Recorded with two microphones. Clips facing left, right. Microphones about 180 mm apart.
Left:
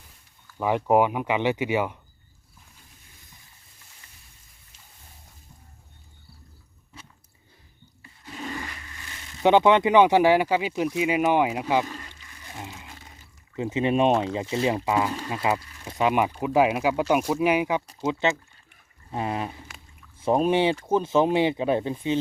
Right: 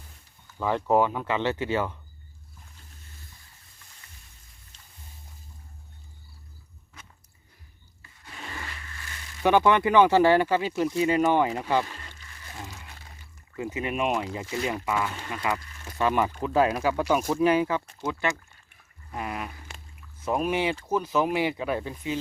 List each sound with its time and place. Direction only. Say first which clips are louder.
0.6 s speech: left 2 dB; 15° left (ahead or behind)
8.4 s a sound: left 5 dB; 20° left (ahead or behind)
10.9 s speech: even; 10° left (ahead or behind)
12.5 s crumpling: left 2 dB; 20° left (ahead or behind)
13.6 s speech: left 6 dB; 25° left (ahead or behind)
15.9 s speech: left 2 dB; 15° left (ahead or behind)